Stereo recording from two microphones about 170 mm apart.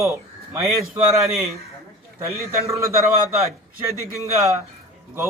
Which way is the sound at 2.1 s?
15° right (ahead or behind).